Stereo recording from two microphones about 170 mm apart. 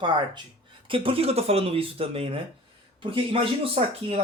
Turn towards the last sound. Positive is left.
turn(degrees=-30)  # may be behind; listen again after turning